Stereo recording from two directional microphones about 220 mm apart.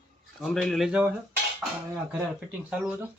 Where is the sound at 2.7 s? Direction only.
5° right (ahead or behind).